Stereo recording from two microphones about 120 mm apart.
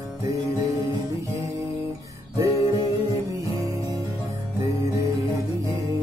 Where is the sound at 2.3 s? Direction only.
25° right (ahead or behind).